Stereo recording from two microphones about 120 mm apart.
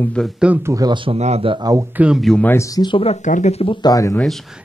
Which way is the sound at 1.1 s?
60° right (ahead or behind).